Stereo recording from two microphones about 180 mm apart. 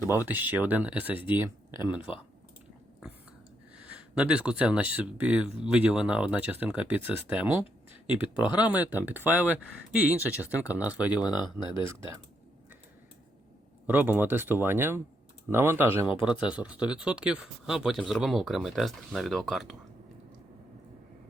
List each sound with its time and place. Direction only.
0.3 s speech: 10° right (ahead or behind)
4.2 s speech: 5° right (ahead or behind)
11.2 s speech: 25° left (ahead or behind)
13.8 s speech: 10° right (ahead or behind)